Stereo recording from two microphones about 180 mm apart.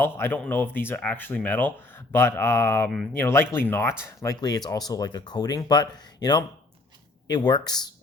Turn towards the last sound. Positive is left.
turn(degrees=25)  # may be behind; listen again after turning